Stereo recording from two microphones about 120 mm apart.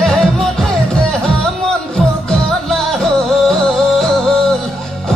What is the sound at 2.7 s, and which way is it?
Music, centre (ahead or behind).